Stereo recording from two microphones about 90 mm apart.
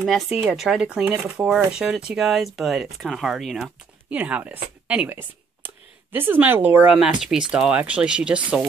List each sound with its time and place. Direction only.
0.0 s speech: centre (ahead or behind)
4.1 s speech: 15° right (ahead or behind)
6.1 s speech: 20° right (ahead or behind)
6.9 s speech: 5° right (ahead or behind)